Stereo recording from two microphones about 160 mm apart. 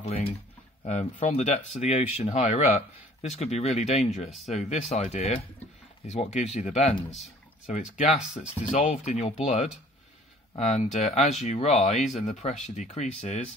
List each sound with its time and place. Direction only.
0.0 s speech: 40° left (ahead or behind)
8.7 s speech: 45° left (ahead or behind)
10.6 s speech: 45° left (ahead or behind)